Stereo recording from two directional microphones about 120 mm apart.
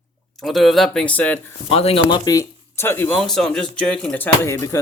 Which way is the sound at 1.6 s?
55° left (ahead or behind).